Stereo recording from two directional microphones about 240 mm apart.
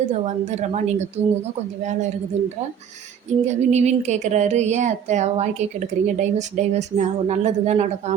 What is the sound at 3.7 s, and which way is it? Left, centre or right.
A woman's voice, right.